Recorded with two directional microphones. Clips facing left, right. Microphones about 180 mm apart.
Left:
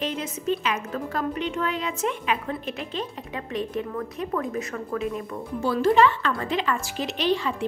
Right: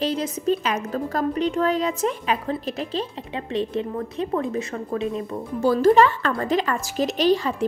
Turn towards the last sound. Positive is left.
turn(degrees=-40)  # may be behind; listen again after turning